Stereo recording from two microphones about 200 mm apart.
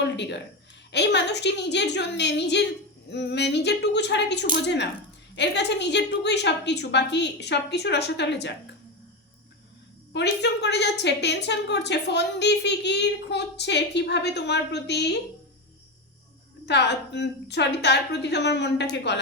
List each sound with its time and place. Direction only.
0.0 s a sound: 60° left (ahead or behind)
0.9 s a woman's voice: 60° left (ahead or behind)
10.1 s a woman's voice: 60° left (ahead or behind)
16.6 s a woman's voice: 60° left (ahead or behind)